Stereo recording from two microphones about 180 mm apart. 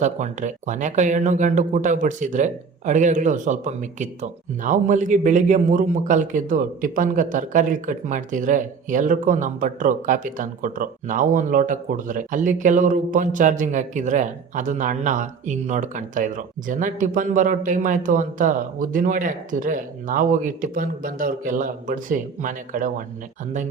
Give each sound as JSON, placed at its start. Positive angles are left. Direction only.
{"t": 0.0, "sound": "speech", "side_deg": -40}